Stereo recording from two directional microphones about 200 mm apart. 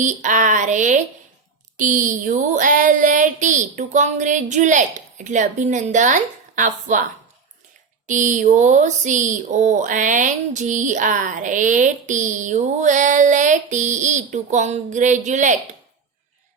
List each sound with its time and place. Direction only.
0.0 s speech: 40° right (ahead or behind)
8.0 s speech: 40° right (ahead or behind)